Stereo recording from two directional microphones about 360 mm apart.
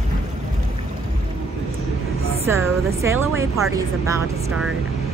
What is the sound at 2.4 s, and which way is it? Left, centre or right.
A woman's voice, centre.